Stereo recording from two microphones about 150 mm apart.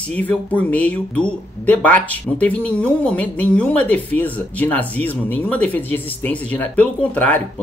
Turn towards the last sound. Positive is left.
turn(degrees=10)  # may be behind; listen again after turning